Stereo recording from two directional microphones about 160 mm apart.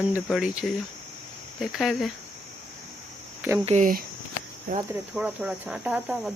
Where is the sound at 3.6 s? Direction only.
45° right (ahead or behind).